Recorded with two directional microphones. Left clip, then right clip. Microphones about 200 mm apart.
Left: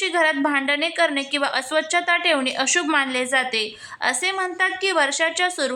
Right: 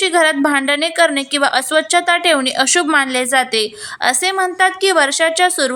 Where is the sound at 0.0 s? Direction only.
20° right (ahead or behind).